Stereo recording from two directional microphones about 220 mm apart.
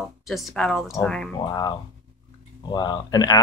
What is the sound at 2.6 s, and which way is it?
Speech, 20° left (ahead or behind).